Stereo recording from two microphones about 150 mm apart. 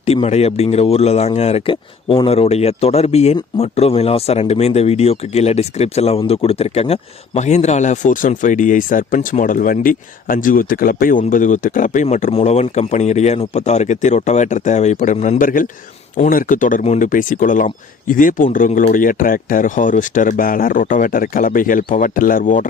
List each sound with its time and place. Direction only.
0.0 s speech: 45° left (ahead or behind); by 12.0 s 60° left (ahead or behind)
12.0 s speech: 45° left (ahead or behind); by 22.6 s 65° left (ahead or behind)